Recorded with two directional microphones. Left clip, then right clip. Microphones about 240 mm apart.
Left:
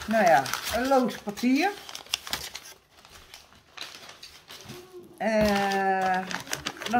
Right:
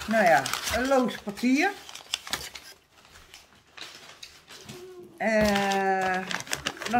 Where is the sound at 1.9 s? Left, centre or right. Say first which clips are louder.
Left 2 dB; left.